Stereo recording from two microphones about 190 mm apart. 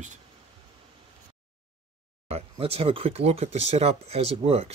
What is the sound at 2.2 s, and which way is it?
Speech, 30° right (ahead or behind).